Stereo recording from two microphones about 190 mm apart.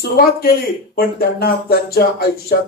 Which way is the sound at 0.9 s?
55° left (ahead or behind).